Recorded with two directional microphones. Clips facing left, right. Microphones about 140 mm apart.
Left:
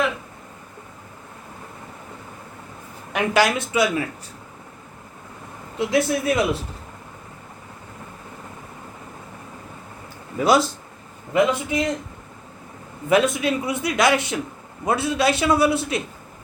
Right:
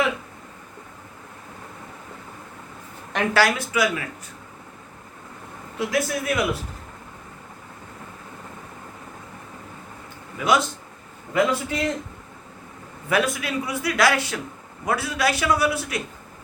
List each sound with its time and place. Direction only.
3.3 s a man's voice: 20° left (ahead or behind)
5.9 s a man's voice: 25° left (ahead or behind)
10.3 s speech: 35° left (ahead or behind)
11.3 s a man's voice: 15° left (ahead or behind)
13.1 s a man's voice: 20° left (ahead or behind)